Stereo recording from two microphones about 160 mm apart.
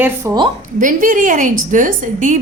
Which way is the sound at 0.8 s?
55° right (ahead or behind).